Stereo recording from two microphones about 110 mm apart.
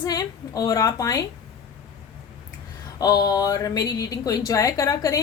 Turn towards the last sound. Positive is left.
turn(degrees=30)  # may be behind; listen again after turning